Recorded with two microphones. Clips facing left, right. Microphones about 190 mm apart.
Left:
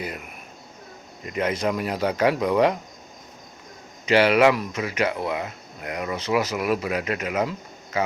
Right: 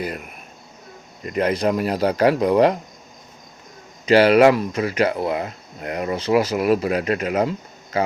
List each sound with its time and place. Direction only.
1.2 s speech: 40° right (ahead or behind)
4.0 s speech: 35° right (ahead or behind)